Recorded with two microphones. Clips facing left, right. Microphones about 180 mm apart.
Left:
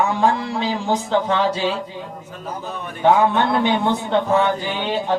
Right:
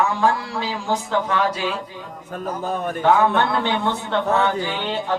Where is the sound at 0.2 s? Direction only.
20° left (ahead or behind).